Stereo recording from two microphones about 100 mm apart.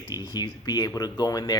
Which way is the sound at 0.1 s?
45° left (ahead or behind).